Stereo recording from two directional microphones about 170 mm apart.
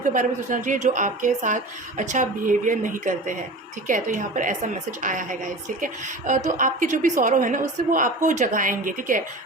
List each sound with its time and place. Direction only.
0.0 s a woman's voice: 50° right (ahead or behind)